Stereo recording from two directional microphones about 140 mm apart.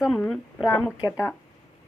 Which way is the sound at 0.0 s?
Centre (ahead or behind).